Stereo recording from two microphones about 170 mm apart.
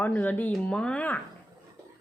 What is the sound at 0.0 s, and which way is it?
Speech, 10° left (ahead or behind).